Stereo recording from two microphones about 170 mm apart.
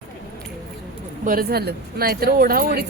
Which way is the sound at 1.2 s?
60° right (ahead or behind).